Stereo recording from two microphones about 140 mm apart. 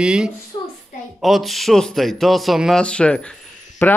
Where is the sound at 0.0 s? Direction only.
5° right (ahead or behind).